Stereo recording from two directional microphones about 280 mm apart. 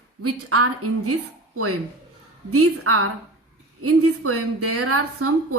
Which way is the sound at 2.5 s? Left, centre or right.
Right.